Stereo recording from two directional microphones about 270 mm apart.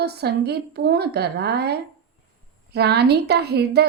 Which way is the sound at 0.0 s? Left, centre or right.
Right.